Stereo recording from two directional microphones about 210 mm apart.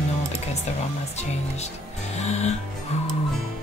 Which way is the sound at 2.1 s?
30° left (ahead or behind).